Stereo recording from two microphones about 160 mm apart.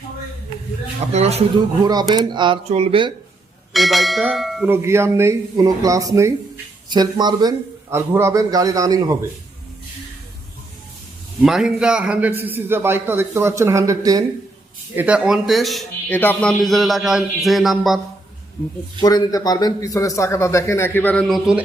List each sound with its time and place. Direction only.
1.1 s speech: 40° right (ahead or behind)
1.8 s a man's voice: 25° right (ahead or behind)
2.6 s speech: 40° right (ahead or behind)
3.7 s a man's voice: centre (ahead or behind)
4.7 s a man's voice: 15° right (ahead or behind)
11.4 s a man's voice: 5° right (ahead or behind); by 14.3 s 25° right (ahead or behind)
14.9 s a man's voice: 5° right (ahead or behind)
16.0 s a man's voice: 10° left (ahead or behind)
18.9 s a man's voice: 25° left (ahead or behind); by 21.6 s 5° right (ahead or behind)